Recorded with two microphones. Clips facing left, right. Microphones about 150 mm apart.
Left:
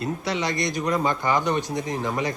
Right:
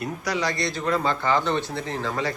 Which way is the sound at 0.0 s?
25° left (ahead or behind).